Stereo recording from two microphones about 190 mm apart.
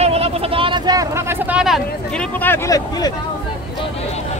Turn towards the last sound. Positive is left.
turn(degrees=15)  # may be behind; listen again after turning